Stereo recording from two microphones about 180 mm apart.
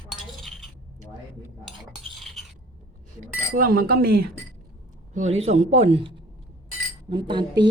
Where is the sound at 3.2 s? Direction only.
50° right (ahead or behind).